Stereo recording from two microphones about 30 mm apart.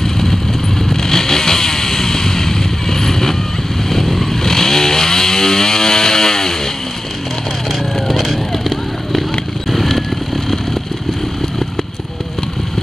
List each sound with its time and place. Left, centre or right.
0.0 s vehicle: centre
8.1 s vehicle: centre